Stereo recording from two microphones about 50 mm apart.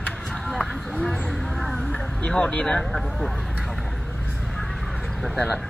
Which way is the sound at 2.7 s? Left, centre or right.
Centre.